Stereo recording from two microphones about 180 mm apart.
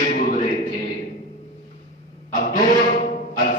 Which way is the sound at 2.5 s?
45° left (ahead or behind).